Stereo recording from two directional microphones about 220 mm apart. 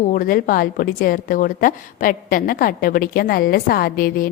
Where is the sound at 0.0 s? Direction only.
35° left (ahead or behind).